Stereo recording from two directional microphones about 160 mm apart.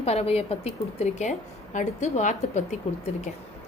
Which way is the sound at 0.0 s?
40° left (ahead or behind).